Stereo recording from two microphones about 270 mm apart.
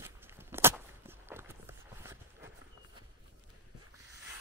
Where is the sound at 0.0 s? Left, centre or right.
Centre.